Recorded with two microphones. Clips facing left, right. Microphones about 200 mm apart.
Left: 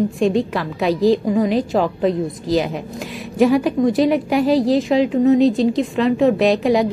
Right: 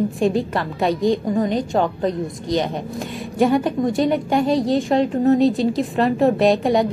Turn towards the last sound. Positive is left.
turn(degrees=0)  # may be behind; listen again after turning